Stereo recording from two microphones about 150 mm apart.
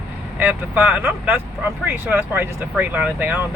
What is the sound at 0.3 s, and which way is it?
Speech, 10° right (ahead or behind).